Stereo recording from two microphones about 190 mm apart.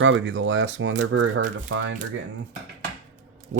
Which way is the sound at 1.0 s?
80° right.